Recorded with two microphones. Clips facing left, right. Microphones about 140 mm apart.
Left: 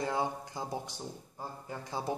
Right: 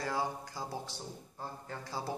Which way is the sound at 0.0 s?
20° left (ahead or behind).